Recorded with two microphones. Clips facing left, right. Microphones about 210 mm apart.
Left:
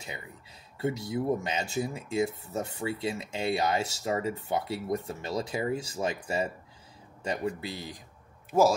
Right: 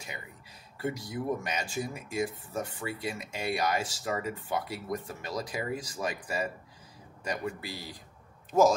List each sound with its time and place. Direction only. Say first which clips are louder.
0.7 s speech: left 4 dB; 25° left (ahead or behind)
8.5 s speech: even; 10° left (ahead or behind)